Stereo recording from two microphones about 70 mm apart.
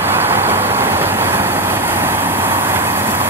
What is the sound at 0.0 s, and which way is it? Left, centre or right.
Vehicle, right.